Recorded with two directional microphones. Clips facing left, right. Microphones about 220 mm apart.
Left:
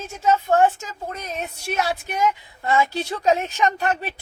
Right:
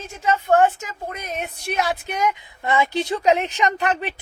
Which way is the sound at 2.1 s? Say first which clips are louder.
Left 1 dB; 20° right (ahead or behind).